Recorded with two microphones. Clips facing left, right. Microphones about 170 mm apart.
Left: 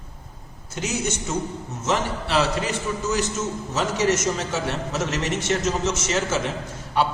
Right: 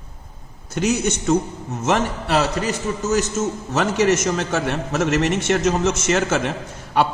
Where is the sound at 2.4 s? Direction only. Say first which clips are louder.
Even; 40° right (ahead or behind).